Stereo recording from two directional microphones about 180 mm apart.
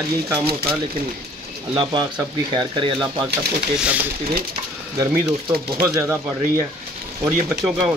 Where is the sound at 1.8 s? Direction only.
25° right (ahead or behind).